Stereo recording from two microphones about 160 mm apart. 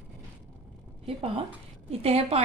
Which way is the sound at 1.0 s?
35° right (ahead or behind).